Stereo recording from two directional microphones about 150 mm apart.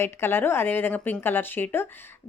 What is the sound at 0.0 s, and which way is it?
Speech, 15° left (ahead or behind).